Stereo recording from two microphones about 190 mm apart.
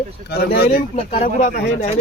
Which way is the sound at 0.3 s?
55° left (ahead or behind).